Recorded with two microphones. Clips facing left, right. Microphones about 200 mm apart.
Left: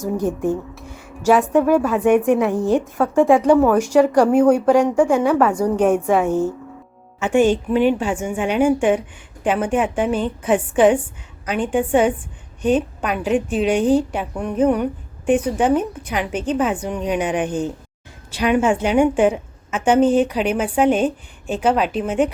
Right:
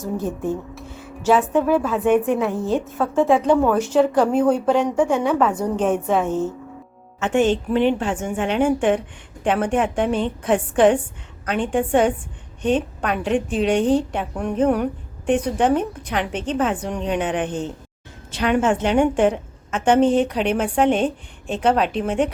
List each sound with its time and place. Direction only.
0.2 s a woman's voice: 15° left (ahead or behind)